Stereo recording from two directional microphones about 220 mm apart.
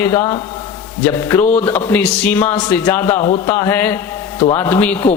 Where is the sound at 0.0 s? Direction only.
10° left (ahead or behind).